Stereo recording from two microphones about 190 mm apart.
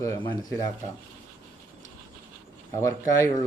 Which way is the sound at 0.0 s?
15° left (ahead or behind).